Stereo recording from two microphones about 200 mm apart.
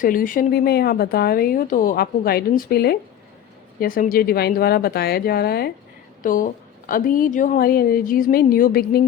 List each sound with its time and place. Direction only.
0.0 s speech: 45° left (ahead or behind)